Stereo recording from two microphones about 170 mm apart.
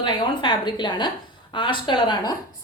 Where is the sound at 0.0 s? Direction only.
25° left (ahead or behind).